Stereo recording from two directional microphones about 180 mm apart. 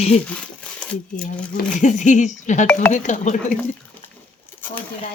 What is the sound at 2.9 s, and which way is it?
Speech, 40° left (ahead or behind).